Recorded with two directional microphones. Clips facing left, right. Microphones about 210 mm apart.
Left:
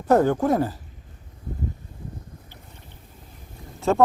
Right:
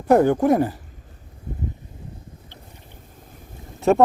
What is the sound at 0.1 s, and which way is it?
Speech, 15° right (ahead or behind).